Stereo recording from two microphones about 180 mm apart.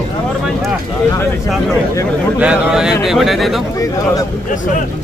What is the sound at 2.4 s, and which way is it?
Speech, 5° right (ahead or behind).